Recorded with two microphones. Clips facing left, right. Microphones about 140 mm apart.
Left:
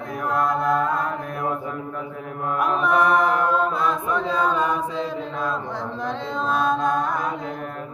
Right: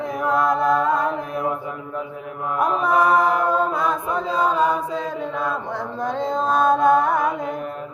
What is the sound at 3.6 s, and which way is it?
Chant, 45° right (ahead or behind).